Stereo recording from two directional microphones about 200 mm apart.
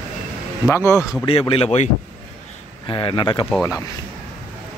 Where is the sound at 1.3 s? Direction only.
25° left (ahead or behind).